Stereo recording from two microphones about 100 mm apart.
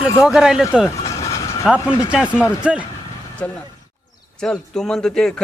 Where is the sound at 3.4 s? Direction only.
15° left (ahead or behind).